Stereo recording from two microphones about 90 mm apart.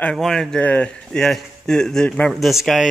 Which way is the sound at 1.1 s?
5° left (ahead or behind).